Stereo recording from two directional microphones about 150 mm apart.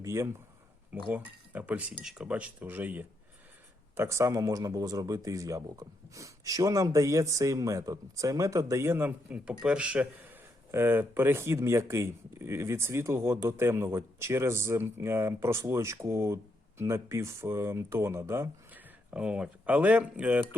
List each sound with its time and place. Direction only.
0.0 s speech: 20° right (ahead or behind)
19.1 s speech: 5° right (ahead or behind)